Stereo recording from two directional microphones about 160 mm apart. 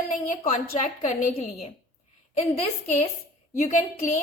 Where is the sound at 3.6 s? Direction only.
50° left (ahead or behind).